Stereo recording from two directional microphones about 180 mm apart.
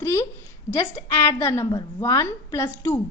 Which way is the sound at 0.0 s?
15° left (ahead or behind).